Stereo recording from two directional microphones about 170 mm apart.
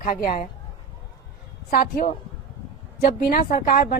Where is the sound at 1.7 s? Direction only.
60° left (ahead or behind).